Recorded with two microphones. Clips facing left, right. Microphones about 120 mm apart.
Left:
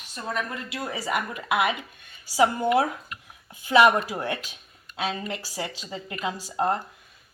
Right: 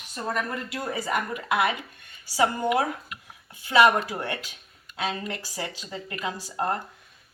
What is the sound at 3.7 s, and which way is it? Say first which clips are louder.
Speech: left 1 dB; 15° left (ahead or behind).